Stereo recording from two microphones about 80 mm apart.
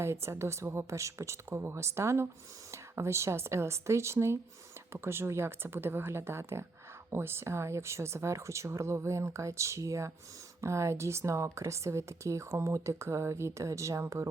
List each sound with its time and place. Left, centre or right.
0.0 s speech: right